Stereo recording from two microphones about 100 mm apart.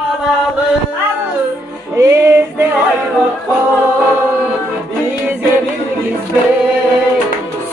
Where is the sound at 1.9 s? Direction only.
30° right (ahead or behind).